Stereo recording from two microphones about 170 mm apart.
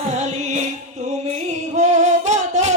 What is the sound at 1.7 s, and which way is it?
Music, 40° right (ahead or behind).